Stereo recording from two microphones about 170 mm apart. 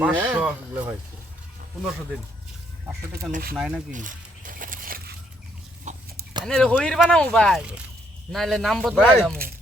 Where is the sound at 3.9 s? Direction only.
50° right (ahead or behind).